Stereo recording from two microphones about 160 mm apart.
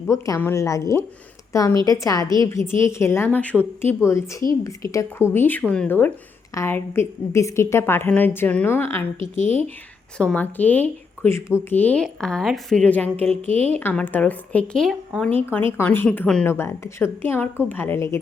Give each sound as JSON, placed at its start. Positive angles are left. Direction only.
{"t": 0.1, "sound": "a woman's voice", "side_deg": 15}
{"t": 9.1, "sound": "speech", "side_deg": 50}
{"t": 10.2, "sound": "speech", "side_deg": 5}
{"t": 16.5, "sound": "speech", "side_deg": 15}